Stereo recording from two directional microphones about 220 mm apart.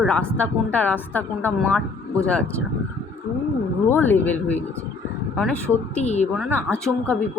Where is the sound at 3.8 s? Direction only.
10° left (ahead or behind).